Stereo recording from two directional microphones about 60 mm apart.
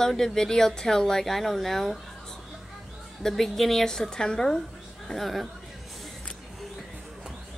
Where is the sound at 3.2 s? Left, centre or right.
Centre.